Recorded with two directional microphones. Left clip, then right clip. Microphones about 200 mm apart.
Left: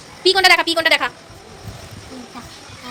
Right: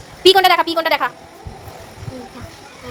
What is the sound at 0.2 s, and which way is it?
Speech, 25° right (ahead or behind).